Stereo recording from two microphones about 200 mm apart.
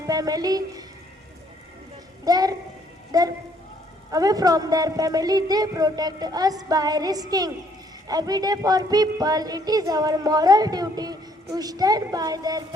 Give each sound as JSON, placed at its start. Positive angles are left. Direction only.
{"t": 0.0, "sound": "a woman's voice", "side_deg": -20}
{"t": 2.2, "sound": "a woman's voice", "side_deg": -20}